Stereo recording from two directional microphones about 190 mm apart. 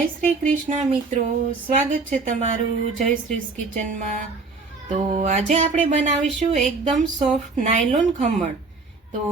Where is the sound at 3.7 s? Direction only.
40° right (ahead or behind).